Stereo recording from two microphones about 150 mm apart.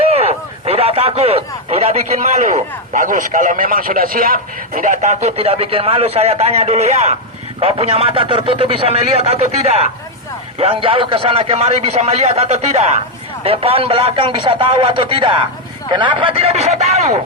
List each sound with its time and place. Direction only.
0.1 s a man's voice: 45° right (ahead or behind)